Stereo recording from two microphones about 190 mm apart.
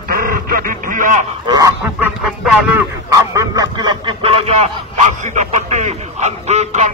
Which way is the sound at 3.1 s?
15° right (ahead or behind).